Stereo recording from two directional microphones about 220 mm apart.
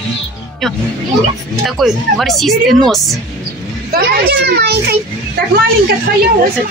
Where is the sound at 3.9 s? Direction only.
45° right (ahead or behind).